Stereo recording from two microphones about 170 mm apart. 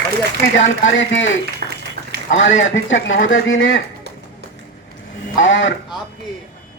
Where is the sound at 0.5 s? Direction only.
90° left.